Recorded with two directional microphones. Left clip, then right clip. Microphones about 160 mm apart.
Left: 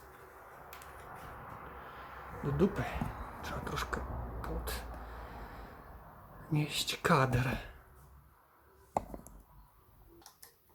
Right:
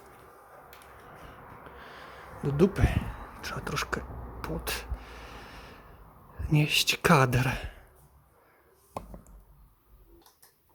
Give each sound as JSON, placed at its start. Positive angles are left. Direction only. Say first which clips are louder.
{"t": 2.4, "sound": "speech", "louder": "right 7 dB", "side_deg": -55}
{"t": 6.5, "sound": "speech", "louder": "right 10 dB", "side_deg": -60}